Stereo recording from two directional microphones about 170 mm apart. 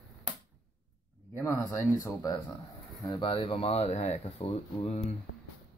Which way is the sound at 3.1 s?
30° left (ahead or behind).